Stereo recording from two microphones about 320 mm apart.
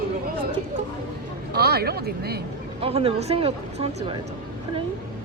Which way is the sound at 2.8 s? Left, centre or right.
Centre.